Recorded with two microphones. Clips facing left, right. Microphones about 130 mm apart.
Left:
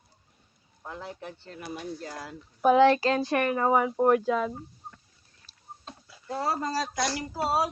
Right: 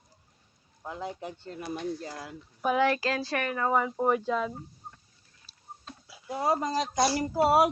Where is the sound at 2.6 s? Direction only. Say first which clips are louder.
Left 6 dB; 30° left (ahead or behind).